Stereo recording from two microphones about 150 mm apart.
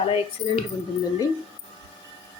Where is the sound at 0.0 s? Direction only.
40° left (ahead or behind).